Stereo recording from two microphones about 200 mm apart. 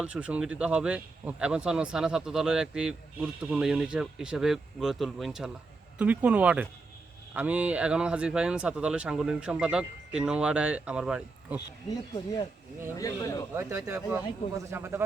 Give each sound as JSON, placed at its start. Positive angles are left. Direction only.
{"t": 0.0, "sound": "speech", "side_deg": -5}
{"t": 13.0, "sound": "speech", "side_deg": 15}
{"t": 13.5, "sound": "speech", "side_deg": -15}